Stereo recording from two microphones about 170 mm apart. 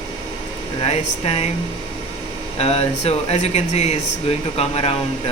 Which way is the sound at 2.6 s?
35° left (ahead or behind).